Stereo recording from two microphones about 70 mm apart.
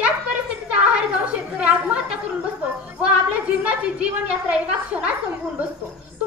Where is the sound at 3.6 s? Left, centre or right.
Centre.